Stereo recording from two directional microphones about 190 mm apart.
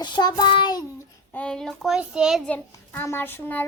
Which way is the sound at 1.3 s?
5° left (ahead or behind).